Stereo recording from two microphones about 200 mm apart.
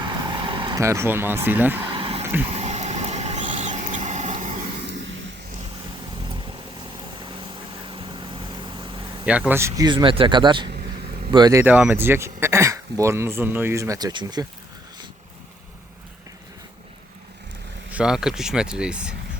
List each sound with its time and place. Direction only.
0.0 s vehicle: 20° right (ahead or behind)
1.9 s vehicle: 30° right (ahead or behind)
2.2 s a sound: 10° right (ahead or behind)
2.5 s a sound: 35° right (ahead or behind)
7.2 s vehicle: 25° right (ahead or behind)
9.5 s speech: 15° right (ahead or behind)
10.7 s vehicle: 45° right (ahead or behind)
11.3 s speech: 20° right (ahead or behind)
17.9 s speech: 5° right (ahead or behind)